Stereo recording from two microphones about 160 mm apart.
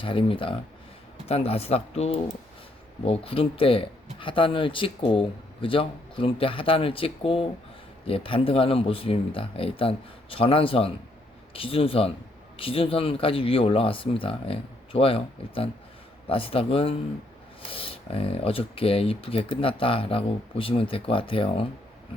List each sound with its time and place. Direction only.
0.0 s speech: 35° left (ahead or behind)